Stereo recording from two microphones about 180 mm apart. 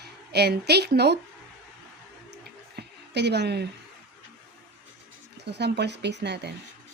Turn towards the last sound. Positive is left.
turn(degrees=-70)  # may be behind; listen again after turning